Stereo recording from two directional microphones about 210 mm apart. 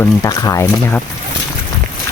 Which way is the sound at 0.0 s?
15° left (ahead or behind).